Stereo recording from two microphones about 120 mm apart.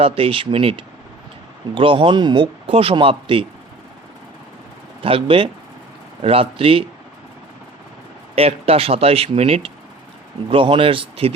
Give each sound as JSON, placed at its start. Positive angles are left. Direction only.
{"t": 0.0, "sound": "speech", "side_deg": -55}
{"t": 5.0, "sound": "speech", "side_deg": -50}
{"t": 8.4, "sound": "speech", "side_deg": -55}